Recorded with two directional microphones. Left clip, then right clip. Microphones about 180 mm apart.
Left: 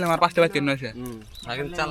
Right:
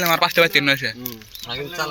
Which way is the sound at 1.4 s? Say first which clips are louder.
Right 1 dB; 25° left (ahead or behind).